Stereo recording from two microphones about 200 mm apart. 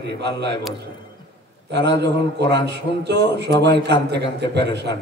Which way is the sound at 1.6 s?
60° right (ahead or behind).